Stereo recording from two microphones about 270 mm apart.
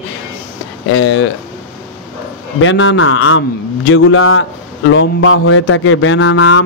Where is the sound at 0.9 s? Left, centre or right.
Left.